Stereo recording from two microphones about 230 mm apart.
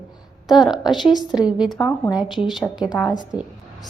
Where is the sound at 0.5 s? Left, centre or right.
Centre.